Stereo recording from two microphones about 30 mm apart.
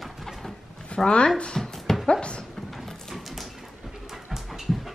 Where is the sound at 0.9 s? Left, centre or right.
Left.